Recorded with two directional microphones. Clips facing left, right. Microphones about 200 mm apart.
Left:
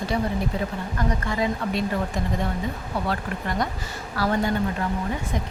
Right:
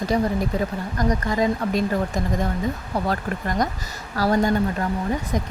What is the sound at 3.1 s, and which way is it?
A woman's voice, 40° right (ahead or behind).